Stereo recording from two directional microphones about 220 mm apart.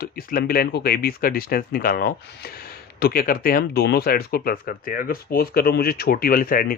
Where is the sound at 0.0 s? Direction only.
45° left (ahead or behind).